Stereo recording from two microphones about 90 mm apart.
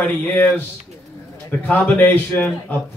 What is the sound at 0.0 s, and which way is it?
Speech, 20° left (ahead or behind).